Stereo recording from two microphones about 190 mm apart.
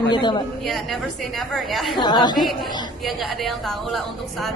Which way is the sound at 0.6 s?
Centre (ahead or behind).